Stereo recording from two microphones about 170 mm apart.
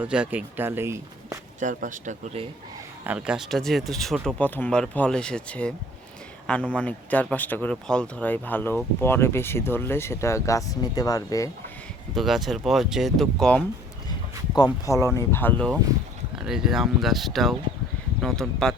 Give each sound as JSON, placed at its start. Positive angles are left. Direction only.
{"t": 0.0, "sound": "speech", "side_deg": -10}
{"t": 1.5, "sound": "speech", "side_deg": -50}
{"t": 3.1, "sound": "speech", "side_deg": -5}
{"t": 12.1, "sound": "speech", "side_deg": 0}
{"t": 14.5, "sound": "speech", "side_deg": 20}
{"t": 16.3, "sound": "speech", "side_deg": -5}